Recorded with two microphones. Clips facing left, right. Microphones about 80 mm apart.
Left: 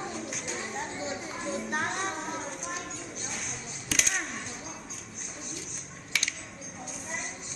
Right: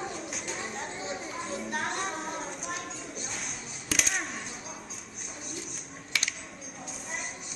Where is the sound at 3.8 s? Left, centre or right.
Centre.